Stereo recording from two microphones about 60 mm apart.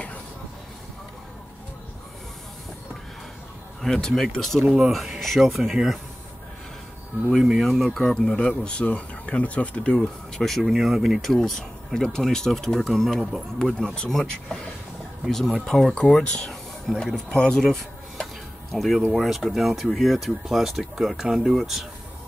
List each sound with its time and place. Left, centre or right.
3.8 s speech: centre
4.6 s speech: centre
4.9 s speech: centre
7.3 s speech: centre
10.4 s speech: centre
11.4 s speech: centre
17.6 s a sound: centre
19.1 s speech: centre